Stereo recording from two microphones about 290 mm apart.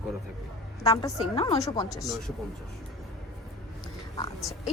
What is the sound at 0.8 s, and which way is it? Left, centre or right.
A woman's voice, centre.